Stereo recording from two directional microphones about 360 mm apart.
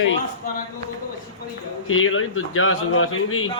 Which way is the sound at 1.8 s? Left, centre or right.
Left.